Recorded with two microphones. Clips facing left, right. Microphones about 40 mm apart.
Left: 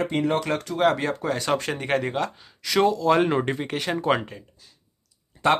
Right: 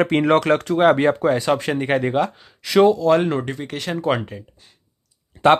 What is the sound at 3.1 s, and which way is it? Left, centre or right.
Speech, centre.